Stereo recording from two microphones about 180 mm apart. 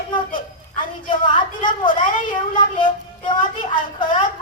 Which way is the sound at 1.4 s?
25° left (ahead or behind).